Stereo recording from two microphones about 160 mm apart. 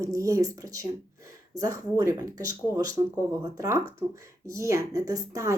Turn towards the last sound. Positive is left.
turn(degrees=-20)  # may be behind; listen again after turning